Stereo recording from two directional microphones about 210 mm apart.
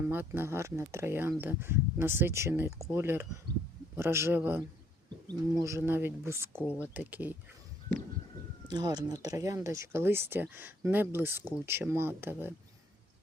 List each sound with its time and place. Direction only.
0.1 s speech: 10° right (ahead or behind)
8.7 s speech: 20° right (ahead or behind)